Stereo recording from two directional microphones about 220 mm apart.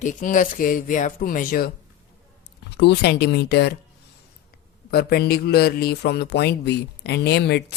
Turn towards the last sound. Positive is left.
turn(degrees=50)  # may be behind; listen again after turning